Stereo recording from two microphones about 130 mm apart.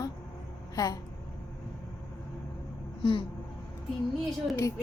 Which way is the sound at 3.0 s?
40° left (ahead or behind).